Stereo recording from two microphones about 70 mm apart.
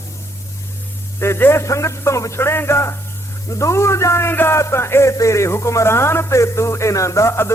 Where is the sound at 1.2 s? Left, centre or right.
Left.